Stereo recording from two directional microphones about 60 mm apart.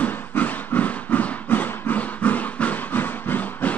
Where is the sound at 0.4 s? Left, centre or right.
Left.